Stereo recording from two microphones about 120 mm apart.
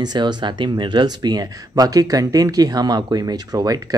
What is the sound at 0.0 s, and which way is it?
Speech, 35° right (ahead or behind).